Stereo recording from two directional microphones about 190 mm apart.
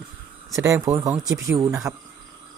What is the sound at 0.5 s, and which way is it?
Speech, 15° right (ahead or behind).